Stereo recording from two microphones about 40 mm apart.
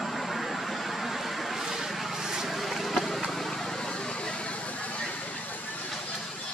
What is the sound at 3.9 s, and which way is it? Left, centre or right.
Vehicle, left.